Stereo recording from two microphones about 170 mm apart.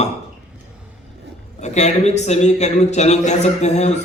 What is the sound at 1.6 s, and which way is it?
A man's voice, 40° left (ahead or behind).